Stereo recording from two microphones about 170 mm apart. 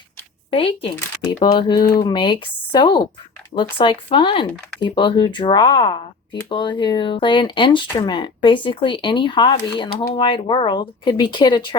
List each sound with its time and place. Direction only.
0.5 s speech: 30° left (ahead or behind)